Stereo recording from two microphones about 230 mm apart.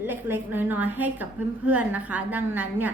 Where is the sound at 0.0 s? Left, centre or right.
Centre.